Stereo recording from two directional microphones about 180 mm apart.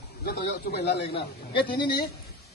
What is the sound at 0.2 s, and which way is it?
Speech, 60° left (ahead or behind).